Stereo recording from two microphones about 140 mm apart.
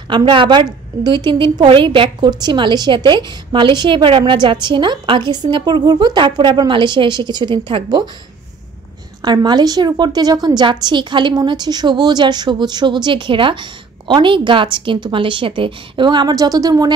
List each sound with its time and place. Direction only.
0.1 s a woman's voice: 35° right (ahead or behind)
9.2 s a woman's voice: 30° right (ahead or behind)